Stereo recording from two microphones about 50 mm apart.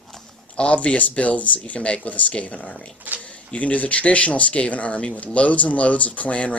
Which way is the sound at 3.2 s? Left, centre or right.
Left.